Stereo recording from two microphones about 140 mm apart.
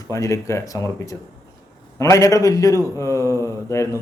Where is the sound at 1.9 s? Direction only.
20° left (ahead or behind).